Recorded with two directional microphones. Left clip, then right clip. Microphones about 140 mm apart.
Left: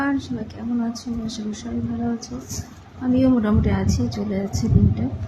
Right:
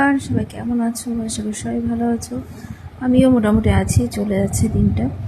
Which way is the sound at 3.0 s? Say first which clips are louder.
Right 5 dB; 40° right (ahead or behind).